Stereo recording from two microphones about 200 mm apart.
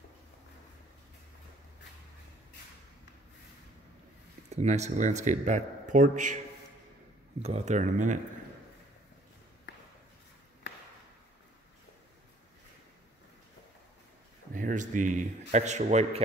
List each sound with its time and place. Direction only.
4.5 s a man's voice: 35° right (ahead or behind)
7.4 s a man's voice: 35° right (ahead or behind)
14.5 s a man's voice: 40° right (ahead or behind)